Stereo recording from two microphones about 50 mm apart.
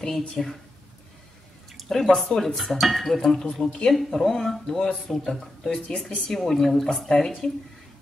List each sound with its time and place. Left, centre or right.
0.4 s speech: left
1.7 s drip: centre
2.1 s speech: centre